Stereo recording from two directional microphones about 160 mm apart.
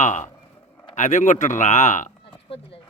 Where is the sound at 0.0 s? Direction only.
50° left (ahead or behind).